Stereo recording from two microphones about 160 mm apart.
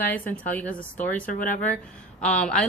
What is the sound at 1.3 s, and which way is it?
Speech, 55° left (ahead or behind).